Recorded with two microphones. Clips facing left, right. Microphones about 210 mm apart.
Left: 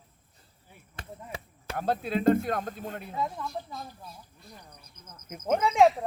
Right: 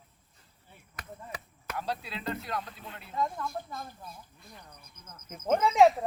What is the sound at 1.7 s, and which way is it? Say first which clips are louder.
Speech: left 8 dB; 50° left (ahead or behind).